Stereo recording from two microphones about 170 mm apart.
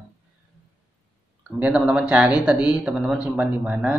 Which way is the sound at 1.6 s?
5° right (ahead or behind).